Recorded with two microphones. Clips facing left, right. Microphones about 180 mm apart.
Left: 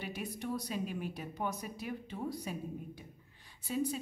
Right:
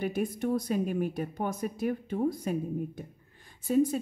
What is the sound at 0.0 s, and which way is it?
Speech, 50° right (ahead or behind).